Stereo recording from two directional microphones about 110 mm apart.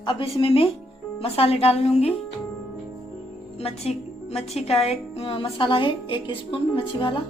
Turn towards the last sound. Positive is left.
turn(degrees=50)  # may be behind; listen again after turning